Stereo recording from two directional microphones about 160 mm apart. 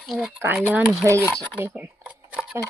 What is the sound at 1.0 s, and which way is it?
Speech, 15° right (ahead or behind).